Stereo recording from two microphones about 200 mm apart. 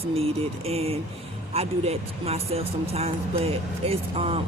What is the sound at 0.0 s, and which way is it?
A woman's voice, 30° right (ahead or behind).